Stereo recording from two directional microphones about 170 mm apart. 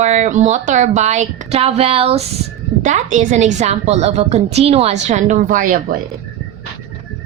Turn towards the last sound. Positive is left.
turn(degrees=-55)  # may be behind; listen again after turning